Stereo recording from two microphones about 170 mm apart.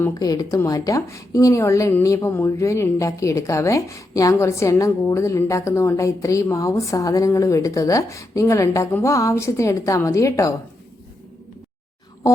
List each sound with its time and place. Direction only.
0.0 s a woman's voice: 20° left (ahead or behind)